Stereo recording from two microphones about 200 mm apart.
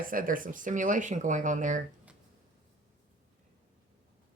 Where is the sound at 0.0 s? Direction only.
45° right (ahead or behind).